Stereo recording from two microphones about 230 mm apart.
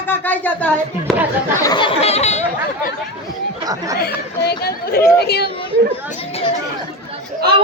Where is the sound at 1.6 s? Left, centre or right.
Centre.